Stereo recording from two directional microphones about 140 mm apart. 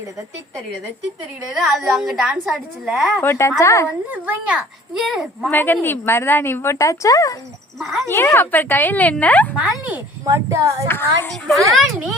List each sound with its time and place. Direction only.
1.5 s speech: centre (ahead or behind)
3.2 s a woman's voice: 20° left (ahead or behind)
4.1 s speech: 10° right (ahead or behind)
5.5 s a woman's voice: 15° left (ahead or behind)
9.6 s speech: 10° right (ahead or behind)
10.2 s speech: 20° right (ahead or behind)
10.8 s a woman's voice: 15° left (ahead or behind)
11.7 s speech: centre (ahead or behind)